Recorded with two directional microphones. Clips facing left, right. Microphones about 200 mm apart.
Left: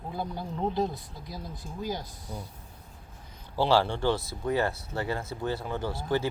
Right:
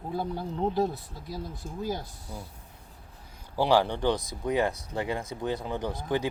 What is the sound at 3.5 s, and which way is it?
Speech, 15° right (ahead or behind).